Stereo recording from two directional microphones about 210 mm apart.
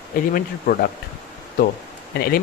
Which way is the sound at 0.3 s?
40° left (ahead or behind).